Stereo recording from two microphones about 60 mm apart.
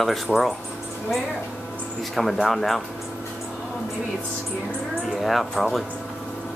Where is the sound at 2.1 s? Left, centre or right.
Centre.